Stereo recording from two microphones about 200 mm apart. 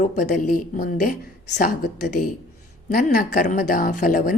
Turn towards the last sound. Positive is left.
turn(degrees=45)  # may be behind; listen again after turning